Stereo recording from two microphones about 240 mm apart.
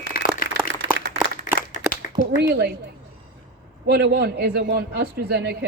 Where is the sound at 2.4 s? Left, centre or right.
Right.